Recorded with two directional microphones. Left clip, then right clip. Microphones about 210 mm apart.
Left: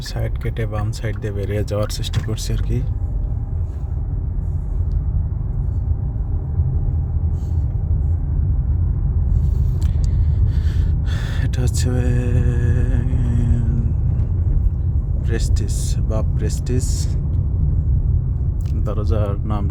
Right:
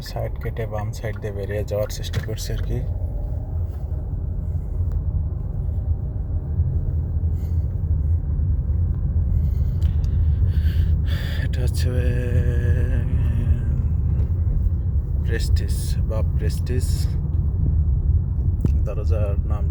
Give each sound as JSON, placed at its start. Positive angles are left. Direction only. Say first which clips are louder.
{"t": 0.1, "sound": "speech", "louder": "right 2 dB", "side_deg": 25}
{"t": 10.5, "sound": "music", "louder": "left 2 dB", "side_deg": 25}
{"t": 15.3, "sound": "speech", "louder": "left 2 dB", "side_deg": 25}
{"t": 18.9, "sound": "speech", "louder": "left 6 dB", "side_deg": 35}